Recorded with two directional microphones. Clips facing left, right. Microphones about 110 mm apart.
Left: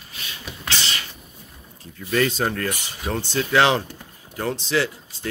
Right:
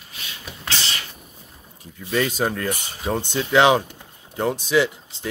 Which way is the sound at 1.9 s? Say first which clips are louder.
Left 1 dB; 10° right (ahead or behind).